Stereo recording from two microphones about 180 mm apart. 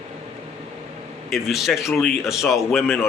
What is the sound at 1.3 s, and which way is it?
A man's voice, centre (ahead or behind).